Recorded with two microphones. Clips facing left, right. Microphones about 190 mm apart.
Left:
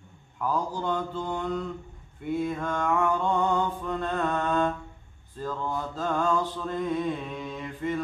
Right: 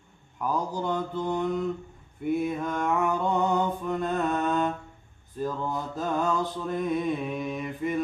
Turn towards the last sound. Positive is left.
turn(degrees=-20)  # may be behind; listen again after turning